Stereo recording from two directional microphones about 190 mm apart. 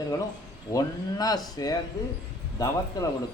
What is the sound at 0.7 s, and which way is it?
A man's voice, 20° left (ahead or behind).